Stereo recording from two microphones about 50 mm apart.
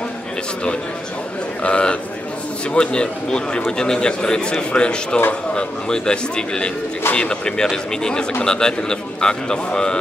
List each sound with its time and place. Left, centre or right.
1.6 s a man's voice: left